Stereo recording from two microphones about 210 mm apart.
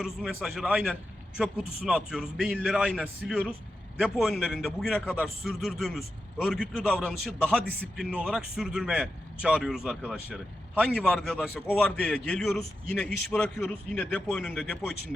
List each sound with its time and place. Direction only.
0.0 s a man's voice: centre (ahead or behind)